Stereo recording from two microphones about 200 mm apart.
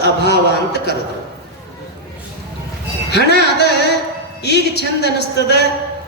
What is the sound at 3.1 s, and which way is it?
A man's voice, 55° left (ahead or behind).